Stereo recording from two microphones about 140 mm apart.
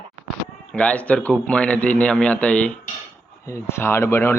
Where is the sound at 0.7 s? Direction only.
5° left (ahead or behind).